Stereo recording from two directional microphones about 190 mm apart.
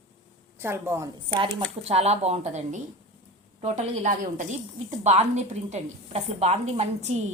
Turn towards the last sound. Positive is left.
turn(degrees=-35)  # may be behind; listen again after turning